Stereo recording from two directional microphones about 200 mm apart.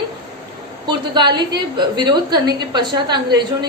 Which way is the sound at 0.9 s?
20° right (ahead or behind).